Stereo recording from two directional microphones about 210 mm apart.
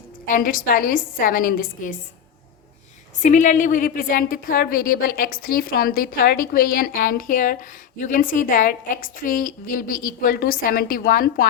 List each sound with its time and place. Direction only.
0.3 s a woman's voice: 40° left (ahead or behind)
3.2 s a woman's voice: 35° left (ahead or behind)